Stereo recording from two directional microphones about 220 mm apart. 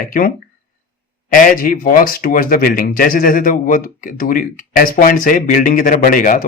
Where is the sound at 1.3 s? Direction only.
40° left (ahead or behind).